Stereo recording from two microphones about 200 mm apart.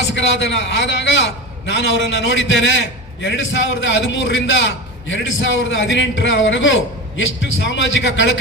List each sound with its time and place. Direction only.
0.1 s a man's voice: 65° left (ahead or behind)